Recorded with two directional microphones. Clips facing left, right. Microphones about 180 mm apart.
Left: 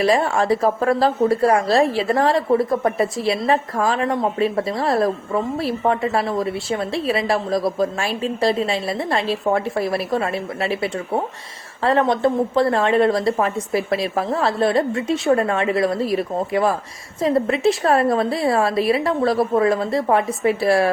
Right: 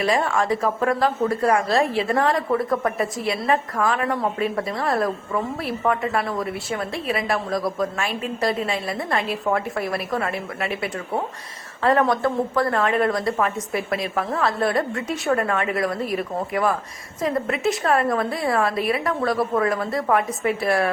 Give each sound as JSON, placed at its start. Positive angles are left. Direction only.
{"t": 0.0, "sound": "a woman's voice", "side_deg": 30}